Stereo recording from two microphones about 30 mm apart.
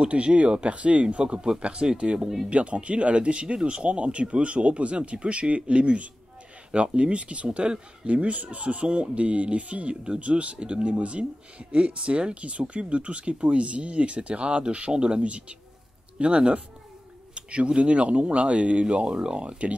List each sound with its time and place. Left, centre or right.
0.0 s speech: right
3.8 s speech: right
17.3 s a sound: right
17.6 s speech: right
19.3 s speech: right